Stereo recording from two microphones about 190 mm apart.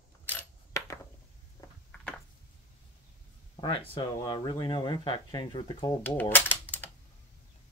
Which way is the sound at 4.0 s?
20° left (ahead or behind).